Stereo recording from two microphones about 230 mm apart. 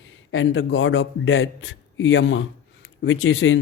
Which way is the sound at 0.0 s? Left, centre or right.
Left.